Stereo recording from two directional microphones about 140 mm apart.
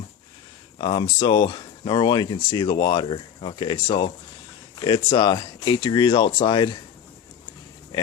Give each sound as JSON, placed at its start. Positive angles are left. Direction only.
{"t": 0.8, "sound": "speech", "side_deg": 35}
{"t": 7.9, "sound": "speech", "side_deg": 30}